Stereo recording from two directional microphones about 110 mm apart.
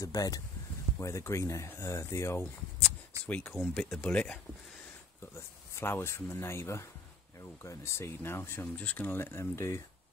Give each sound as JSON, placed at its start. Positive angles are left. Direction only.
{"t": 0.0, "sound": "speech", "side_deg": 30}
{"t": 2.4, "sound": "a sound", "side_deg": 15}
{"t": 3.3, "sound": "speech", "side_deg": 15}
{"t": 3.7, "sound": "speech", "side_deg": 5}
{"t": 5.8, "sound": "speech", "side_deg": 25}